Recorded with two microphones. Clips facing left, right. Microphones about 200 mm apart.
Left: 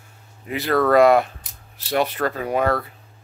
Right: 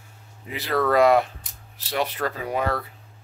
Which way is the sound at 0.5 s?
55° left (ahead or behind).